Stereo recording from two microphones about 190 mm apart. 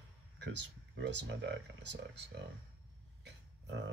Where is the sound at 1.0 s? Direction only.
65° right (ahead or behind).